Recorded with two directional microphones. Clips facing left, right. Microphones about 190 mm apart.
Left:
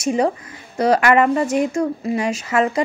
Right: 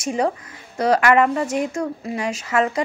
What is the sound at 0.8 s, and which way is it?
A woman's voice, 15° left (ahead or behind).